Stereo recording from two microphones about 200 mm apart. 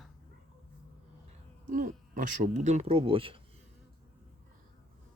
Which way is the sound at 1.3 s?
40° right (ahead or behind).